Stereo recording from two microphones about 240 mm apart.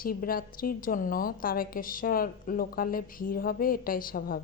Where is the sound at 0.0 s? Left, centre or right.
Left.